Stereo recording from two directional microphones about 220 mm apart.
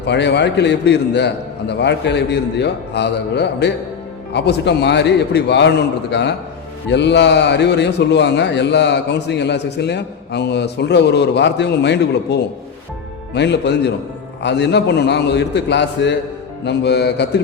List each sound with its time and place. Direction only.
0.0 s a man's voice: 50° left (ahead or behind)